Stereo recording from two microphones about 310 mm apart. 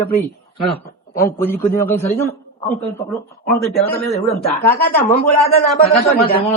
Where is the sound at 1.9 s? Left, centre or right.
Centre.